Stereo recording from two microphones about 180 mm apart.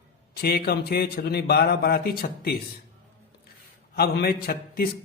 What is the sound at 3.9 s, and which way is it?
Speech, 60° left (ahead or behind).